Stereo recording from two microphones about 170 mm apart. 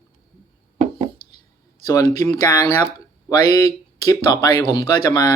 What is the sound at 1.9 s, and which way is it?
Speech, 20° left (ahead or behind).